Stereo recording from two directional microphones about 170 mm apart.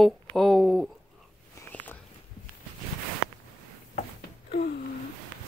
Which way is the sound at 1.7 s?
10° left (ahead or behind).